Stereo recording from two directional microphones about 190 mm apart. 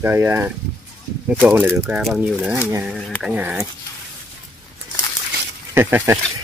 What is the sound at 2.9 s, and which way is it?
Speech, centre (ahead or behind).